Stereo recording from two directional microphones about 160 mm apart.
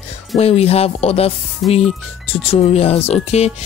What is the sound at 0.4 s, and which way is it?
Speech, 40° left (ahead or behind).